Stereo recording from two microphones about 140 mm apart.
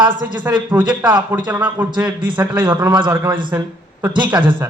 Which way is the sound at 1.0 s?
30° right (ahead or behind).